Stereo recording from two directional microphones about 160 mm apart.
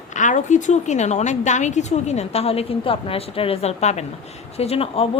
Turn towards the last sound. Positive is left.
turn(degrees=40)  # may be behind; listen again after turning